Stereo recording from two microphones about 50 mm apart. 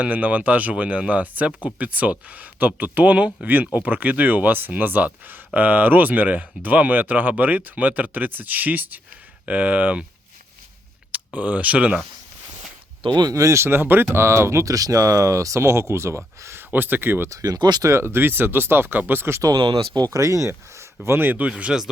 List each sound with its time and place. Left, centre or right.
0.0 s speech: right
11.1 s speech: right
13.4 s speech: right
13.7 s speech: right
16.6 s speech: right
17.8 s speech: right
20.1 s speech: right
20.5 s speech: right
21.2 s speech: right
21.4 s speech: centre